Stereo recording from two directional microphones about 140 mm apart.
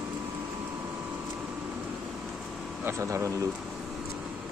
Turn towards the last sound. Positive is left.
turn(degrees=-20)  # may be behind; listen again after turning